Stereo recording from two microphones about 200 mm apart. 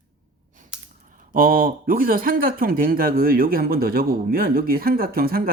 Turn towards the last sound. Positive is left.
turn(degrees=-50)  # may be behind; listen again after turning